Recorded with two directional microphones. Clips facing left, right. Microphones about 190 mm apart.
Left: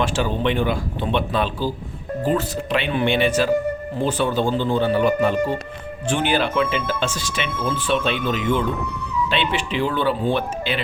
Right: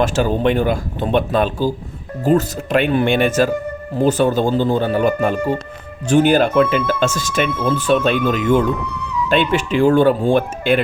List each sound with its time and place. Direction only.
0.0 s speech: 45° right (ahead or behind)